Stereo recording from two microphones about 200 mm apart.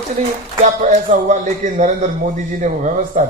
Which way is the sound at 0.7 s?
40° right (ahead or behind).